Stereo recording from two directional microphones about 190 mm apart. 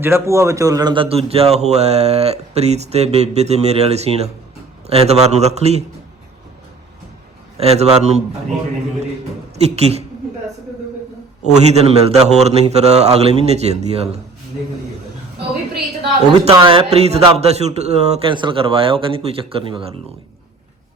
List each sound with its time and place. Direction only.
0.0 s speech: 15° right (ahead or behind); by 5.8 s 35° right (ahead or behind)
7.6 s speech: 35° right (ahead or behind)
9.6 s a woman's voice: 35° right (ahead or behind)
11.4 s speech: 35° right (ahead or behind)
16.5 s speech: 25° right (ahead or behind)